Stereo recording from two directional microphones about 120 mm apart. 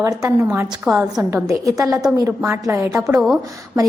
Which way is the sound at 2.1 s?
5° right (ahead or behind).